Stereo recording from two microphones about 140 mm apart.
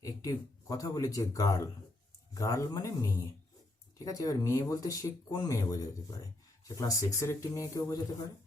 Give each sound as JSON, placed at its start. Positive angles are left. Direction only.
{"t": 0.0, "sound": "speech", "side_deg": 25}